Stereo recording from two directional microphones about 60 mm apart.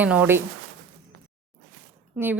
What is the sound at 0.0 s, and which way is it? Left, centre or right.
Speech, right.